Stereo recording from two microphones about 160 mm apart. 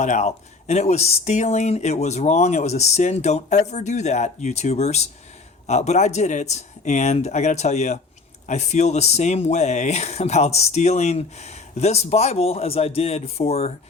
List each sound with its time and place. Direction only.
0.0 s speech: 45° left (ahead or behind)